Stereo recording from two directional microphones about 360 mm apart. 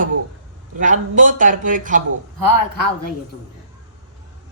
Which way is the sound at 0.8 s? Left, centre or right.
Right.